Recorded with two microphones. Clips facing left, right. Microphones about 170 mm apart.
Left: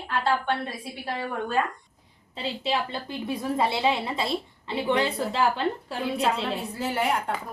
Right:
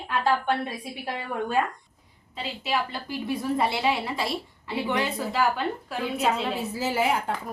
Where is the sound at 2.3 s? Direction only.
30° left (ahead or behind).